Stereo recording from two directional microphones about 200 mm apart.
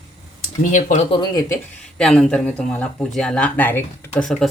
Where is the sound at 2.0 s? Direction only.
5° left (ahead or behind).